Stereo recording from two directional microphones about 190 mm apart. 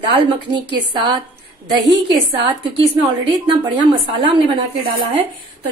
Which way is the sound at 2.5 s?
25° right (ahead or behind).